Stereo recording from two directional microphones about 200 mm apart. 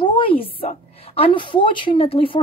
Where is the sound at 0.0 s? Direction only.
25° left (ahead or behind).